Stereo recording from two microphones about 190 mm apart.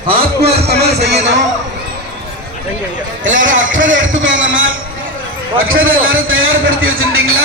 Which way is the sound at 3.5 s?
45° right (ahead or behind).